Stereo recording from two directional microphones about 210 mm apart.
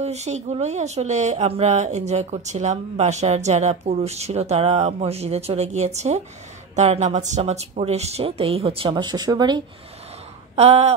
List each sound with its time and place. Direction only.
0.0 s speech: 30° right (ahead or behind)
10.5 s speech: 30° right (ahead or behind)